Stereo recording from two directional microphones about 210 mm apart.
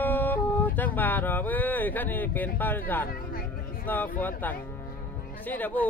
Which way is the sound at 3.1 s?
45° left (ahead or behind).